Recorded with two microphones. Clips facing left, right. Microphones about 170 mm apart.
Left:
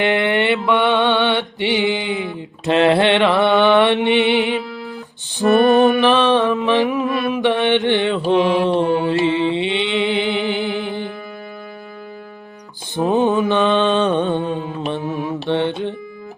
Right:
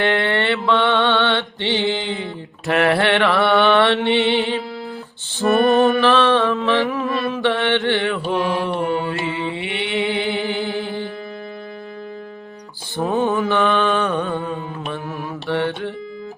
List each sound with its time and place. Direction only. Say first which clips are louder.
0.0 s mantra: left 2 dB; 15° left (ahead or behind)
5.4 s music: left 2 dB; 20° left (ahead or behind)
8.4 s mantra: left 6 dB; 25° left (ahead or behind)
13.0 s music: left 3 dB; 20° left (ahead or behind)